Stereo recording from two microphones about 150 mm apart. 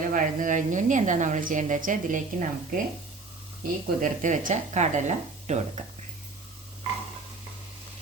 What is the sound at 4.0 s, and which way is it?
Speech, 60° right (ahead or behind).